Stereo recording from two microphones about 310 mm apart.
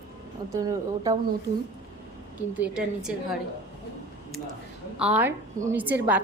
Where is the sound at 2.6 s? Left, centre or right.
Centre.